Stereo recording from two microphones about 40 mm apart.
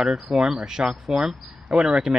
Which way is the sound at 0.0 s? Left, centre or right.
Centre.